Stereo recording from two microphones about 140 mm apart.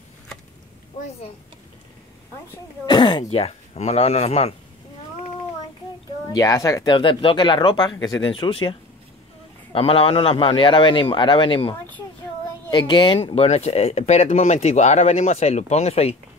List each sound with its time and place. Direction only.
2.9 s speech: 35° left (ahead or behind)
3.3 s speech: 50° left (ahead or behind)
6.3 s speech: 25° left (ahead or behind)
12.7 s speech: 35° left (ahead or behind)